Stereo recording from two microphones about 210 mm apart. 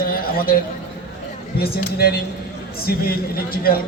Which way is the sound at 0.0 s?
45° left (ahead or behind).